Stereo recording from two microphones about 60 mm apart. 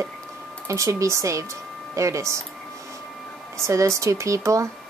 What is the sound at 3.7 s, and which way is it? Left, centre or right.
A woman's voice, right.